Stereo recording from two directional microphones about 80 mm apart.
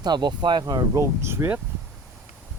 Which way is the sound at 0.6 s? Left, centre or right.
Right.